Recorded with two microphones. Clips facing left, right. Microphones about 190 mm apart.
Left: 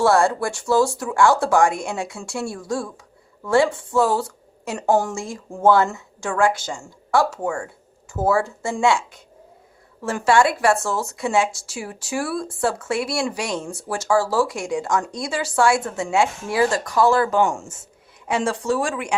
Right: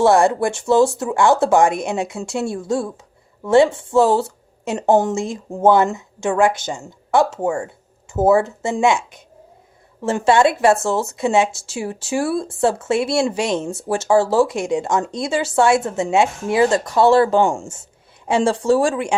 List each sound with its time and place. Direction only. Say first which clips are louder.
0.0 s speech: right 3 dB; 20° right (ahead or behind)